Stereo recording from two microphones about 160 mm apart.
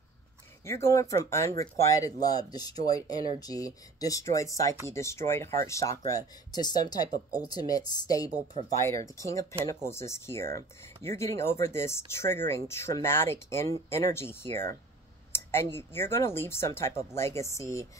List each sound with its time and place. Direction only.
0.7 s speech: 15° left (ahead or behind)